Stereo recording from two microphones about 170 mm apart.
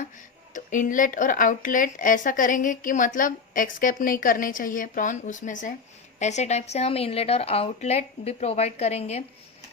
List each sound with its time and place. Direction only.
0.5 s speech: 50° left (ahead or behind)